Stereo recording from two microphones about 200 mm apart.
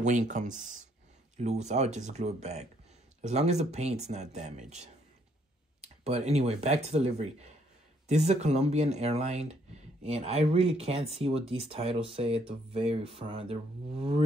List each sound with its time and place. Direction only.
0.0 s speech: 35° right (ahead or behind)